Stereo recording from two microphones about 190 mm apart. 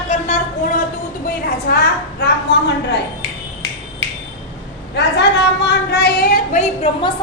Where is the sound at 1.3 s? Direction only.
55° left (ahead or behind).